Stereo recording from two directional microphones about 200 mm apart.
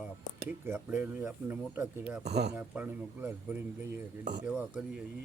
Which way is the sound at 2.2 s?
55° right (ahead or behind).